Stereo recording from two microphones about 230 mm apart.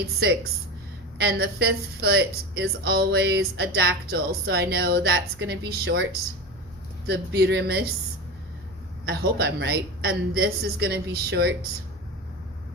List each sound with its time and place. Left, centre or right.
1.2 s speech: right
7.1 s speech: right
9.0 s speech: right